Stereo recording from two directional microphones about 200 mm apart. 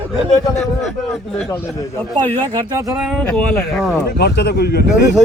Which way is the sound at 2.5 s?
15° right (ahead or behind).